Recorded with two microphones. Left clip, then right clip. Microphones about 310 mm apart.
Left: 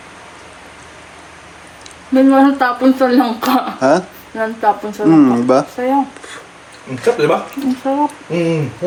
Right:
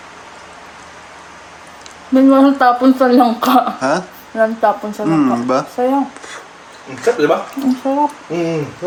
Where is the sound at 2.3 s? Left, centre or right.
Centre.